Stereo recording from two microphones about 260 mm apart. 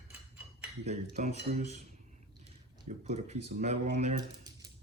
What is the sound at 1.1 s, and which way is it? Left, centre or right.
Speech, right.